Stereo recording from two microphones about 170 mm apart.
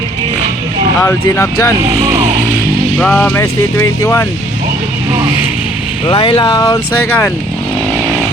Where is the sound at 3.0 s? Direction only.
5° left (ahead or behind).